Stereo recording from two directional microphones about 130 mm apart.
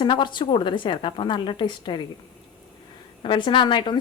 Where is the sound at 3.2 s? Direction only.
40° left (ahead or behind).